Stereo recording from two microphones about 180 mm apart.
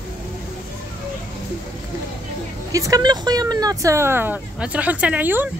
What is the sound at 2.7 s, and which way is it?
Speech, 20° right (ahead or behind).